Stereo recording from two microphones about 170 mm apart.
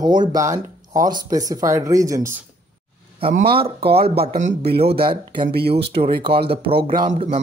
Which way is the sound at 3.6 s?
30° right (ahead or behind).